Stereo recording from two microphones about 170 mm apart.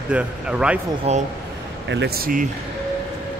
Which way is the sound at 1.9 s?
80° right.